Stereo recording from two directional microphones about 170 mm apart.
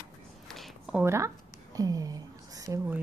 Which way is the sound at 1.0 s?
15° right (ahead or behind).